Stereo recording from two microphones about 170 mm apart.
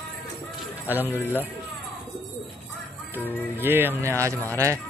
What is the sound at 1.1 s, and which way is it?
Speech, 10° left (ahead or behind).